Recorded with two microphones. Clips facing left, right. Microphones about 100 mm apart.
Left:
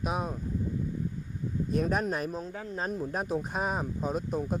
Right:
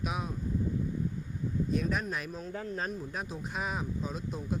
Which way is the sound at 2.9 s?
45° left (ahead or behind).